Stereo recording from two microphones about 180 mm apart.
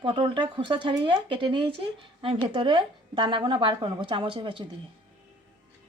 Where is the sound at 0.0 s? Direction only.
25° right (ahead or behind).